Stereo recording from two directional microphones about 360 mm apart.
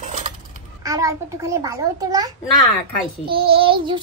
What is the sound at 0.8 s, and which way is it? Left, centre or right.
Child singing, centre.